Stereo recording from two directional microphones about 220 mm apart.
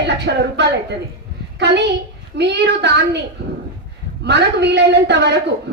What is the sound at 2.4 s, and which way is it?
Speech, 50° right (ahead or behind).